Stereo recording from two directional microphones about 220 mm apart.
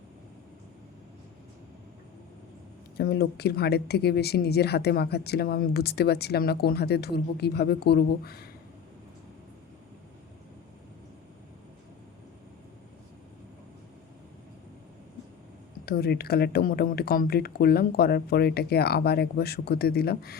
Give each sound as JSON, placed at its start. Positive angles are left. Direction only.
{"t": 3.0, "sound": "speech", "side_deg": 45}
{"t": 15.9, "sound": "speech", "side_deg": 45}